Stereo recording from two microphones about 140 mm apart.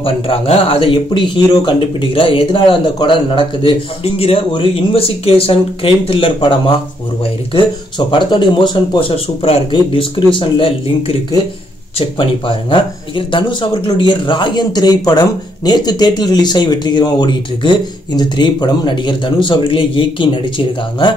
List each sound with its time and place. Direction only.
0.0 s speech: 40° left (ahead or behind)
8.1 s speech: 35° left (ahead or behind)